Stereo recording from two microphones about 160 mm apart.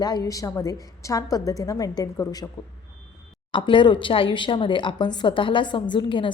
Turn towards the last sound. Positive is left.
turn(degrees=30)  # may be behind; listen again after turning